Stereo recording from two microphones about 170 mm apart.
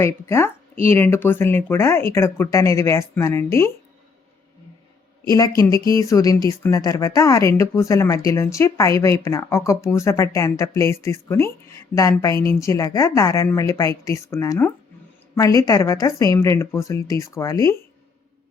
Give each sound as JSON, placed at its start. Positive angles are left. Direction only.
{"t": 0.0, "sound": "speech", "side_deg": 15}
{"t": 5.4, "sound": "speech", "side_deg": 20}